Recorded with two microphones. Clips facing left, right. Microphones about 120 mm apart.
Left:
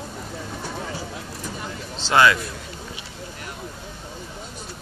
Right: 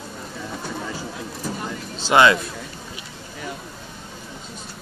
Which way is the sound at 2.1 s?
20° right (ahead or behind).